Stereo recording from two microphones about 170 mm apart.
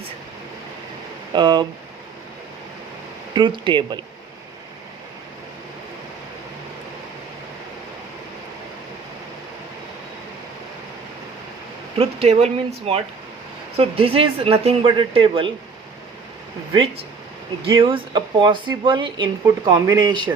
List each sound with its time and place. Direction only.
1.3 s speech: 25° right (ahead or behind)
3.3 s speech: 30° right (ahead or behind)
11.9 s speech: 35° right (ahead or behind)
17.6 s speech: 30° right (ahead or behind)